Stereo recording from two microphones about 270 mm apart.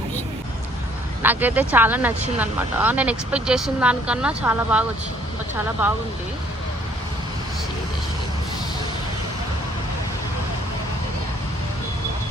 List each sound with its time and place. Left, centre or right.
1.2 s speech: centre